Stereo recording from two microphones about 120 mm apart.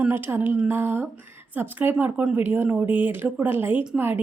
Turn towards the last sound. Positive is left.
turn(degrees=-15)  # may be behind; listen again after turning